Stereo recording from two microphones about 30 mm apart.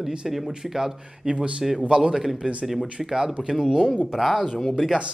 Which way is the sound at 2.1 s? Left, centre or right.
Centre.